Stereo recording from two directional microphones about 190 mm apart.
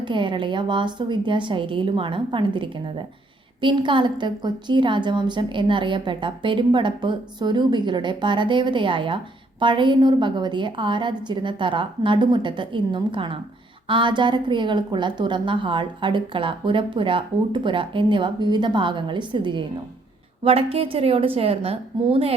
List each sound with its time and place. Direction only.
0.0 s a woman's voice: 25° right (ahead or behind)